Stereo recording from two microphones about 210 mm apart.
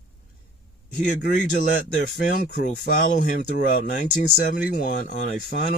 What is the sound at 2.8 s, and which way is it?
Speech, 40° left (ahead or behind).